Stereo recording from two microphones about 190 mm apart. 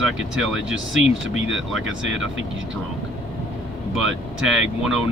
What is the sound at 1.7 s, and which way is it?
Speech, 90° right.